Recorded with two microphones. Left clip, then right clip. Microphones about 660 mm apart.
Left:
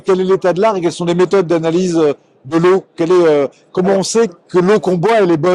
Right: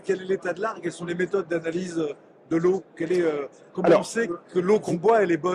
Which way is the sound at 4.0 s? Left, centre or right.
Left.